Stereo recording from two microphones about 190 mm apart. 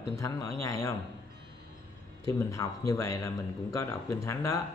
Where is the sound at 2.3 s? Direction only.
15° left (ahead or behind).